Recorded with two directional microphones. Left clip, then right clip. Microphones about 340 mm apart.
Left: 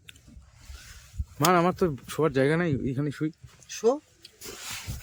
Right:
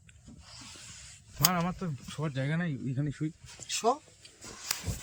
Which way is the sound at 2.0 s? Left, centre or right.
Centre.